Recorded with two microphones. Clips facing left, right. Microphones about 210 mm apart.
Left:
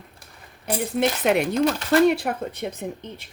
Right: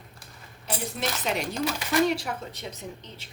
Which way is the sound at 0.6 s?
55° left (ahead or behind).